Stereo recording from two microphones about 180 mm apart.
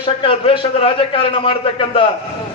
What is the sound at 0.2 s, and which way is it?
A man's voice, 30° left (ahead or behind).